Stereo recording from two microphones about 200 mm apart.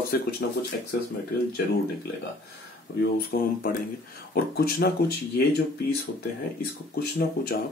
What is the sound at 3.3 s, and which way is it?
Speech, 50° left (ahead or behind).